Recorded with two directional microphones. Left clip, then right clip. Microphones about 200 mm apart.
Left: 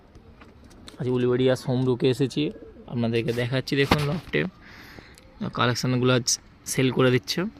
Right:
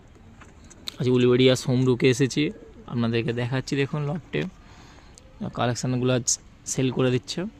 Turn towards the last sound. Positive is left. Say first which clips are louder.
# left 3 dB
turn(degrees=0)  # may be behind; listen again after turning